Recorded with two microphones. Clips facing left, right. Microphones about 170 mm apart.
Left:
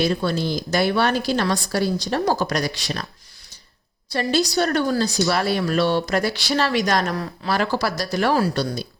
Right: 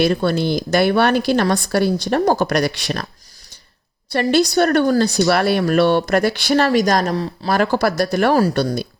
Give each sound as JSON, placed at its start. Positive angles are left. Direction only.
{"t": 0.0, "sound": "a woman's voice", "side_deg": -60}
{"t": 4.1, "sound": "a woman's voice", "side_deg": -65}
{"t": 7.5, "sound": "a woman's voice", "side_deg": -50}